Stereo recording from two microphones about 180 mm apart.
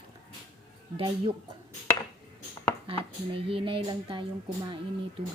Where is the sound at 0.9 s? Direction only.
25° right (ahead or behind).